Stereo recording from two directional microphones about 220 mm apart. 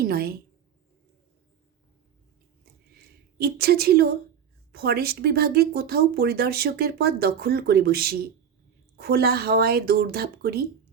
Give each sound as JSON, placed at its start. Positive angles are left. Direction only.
{"t": 0.0, "sound": "speech", "side_deg": -45}
{"t": 3.3, "sound": "speech", "side_deg": -45}